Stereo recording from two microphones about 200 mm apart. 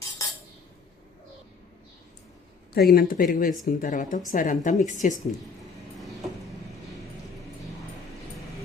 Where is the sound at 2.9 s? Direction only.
45° left (ahead or behind).